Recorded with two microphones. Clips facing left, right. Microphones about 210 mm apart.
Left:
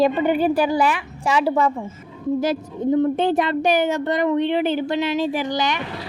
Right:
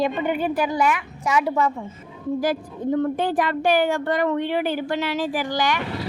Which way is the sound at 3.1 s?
25° left (ahead or behind).